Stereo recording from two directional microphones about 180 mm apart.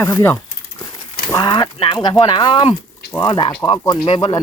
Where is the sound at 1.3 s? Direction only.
25° left (ahead or behind).